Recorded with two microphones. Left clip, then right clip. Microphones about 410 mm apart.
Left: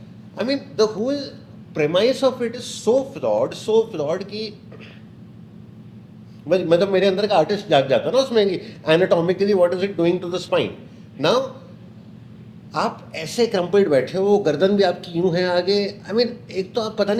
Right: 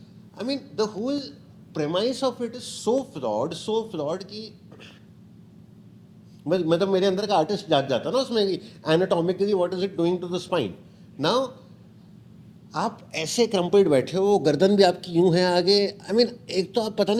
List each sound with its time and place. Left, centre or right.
0.3 s a man's voice: right
6.5 s a man's voice: right
12.7 s a man's voice: right